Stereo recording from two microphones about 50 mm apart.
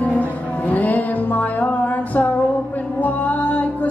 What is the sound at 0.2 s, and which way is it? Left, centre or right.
Music, left.